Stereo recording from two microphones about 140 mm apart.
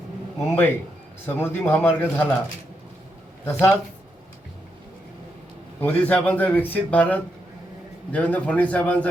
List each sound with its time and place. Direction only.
0.5 s speech: 15° left (ahead or behind)
3.4 s speech: 20° left (ahead or behind)
5.8 s speech: 10° left (ahead or behind)